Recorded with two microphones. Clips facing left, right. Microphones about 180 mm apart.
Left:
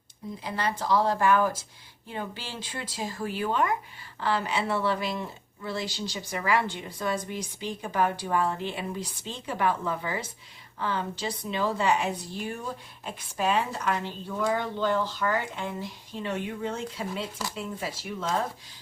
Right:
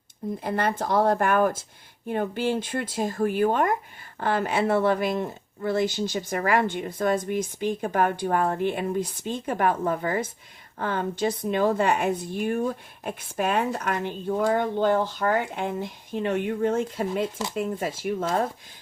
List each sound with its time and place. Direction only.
0.3 s speech: 55° right (ahead or behind)